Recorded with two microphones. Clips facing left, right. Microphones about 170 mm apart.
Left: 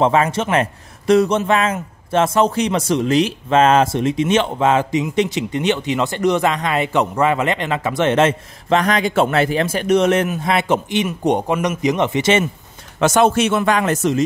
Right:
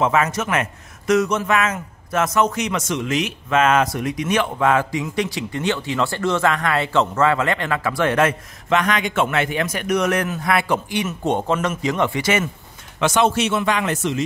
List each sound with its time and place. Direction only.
0.0 s a man's voice: 30° left (ahead or behind)
13.0 s speech: 45° left (ahead or behind)